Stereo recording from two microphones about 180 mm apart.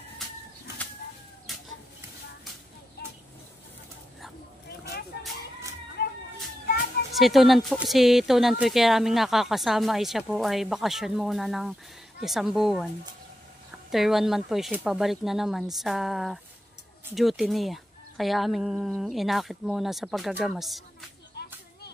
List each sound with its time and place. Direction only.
1.5 s chicken: centre (ahead or behind)
6.0 s a sound: 55° left (ahead or behind)
7.2 s speech: centre (ahead or behind)
13.9 s speech: centre (ahead or behind)
21.4 s children playing: 65° left (ahead or behind)